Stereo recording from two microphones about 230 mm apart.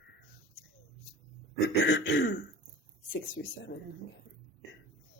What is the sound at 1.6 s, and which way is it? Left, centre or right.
Throat clearing, left.